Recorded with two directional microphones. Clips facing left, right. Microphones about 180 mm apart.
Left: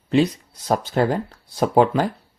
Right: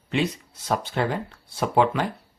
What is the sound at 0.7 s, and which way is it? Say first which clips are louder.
Speech: left 5 dB; 40° left (ahead or behind).